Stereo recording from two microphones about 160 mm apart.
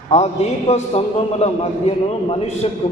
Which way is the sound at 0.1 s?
45° left (ahead or behind).